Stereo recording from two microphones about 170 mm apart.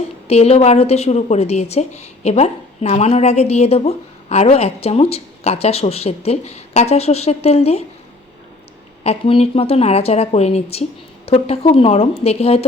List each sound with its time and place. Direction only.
0.3 s a woman's voice: 35° left (ahead or behind)
9.0 s a woman's voice: 35° left (ahead or behind)